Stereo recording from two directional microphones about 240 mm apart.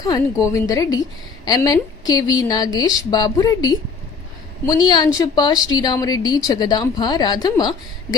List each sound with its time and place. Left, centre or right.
0.0 s a woman's voice: centre